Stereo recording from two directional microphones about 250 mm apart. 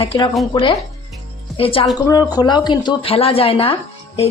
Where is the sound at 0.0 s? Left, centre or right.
Left.